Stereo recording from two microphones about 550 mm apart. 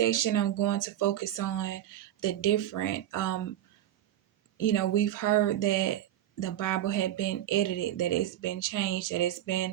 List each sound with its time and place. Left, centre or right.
0.0 s speech: left
4.5 s speech: left